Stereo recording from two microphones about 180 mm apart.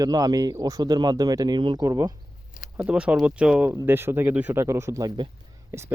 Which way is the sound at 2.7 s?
5° right (ahead or behind).